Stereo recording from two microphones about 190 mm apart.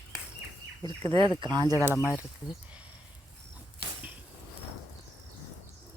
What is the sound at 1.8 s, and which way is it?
Speech, 10° right (ahead or behind).